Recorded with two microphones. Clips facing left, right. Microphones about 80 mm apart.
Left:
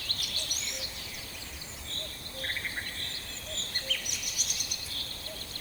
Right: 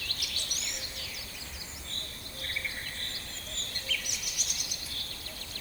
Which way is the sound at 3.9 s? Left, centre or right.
Left.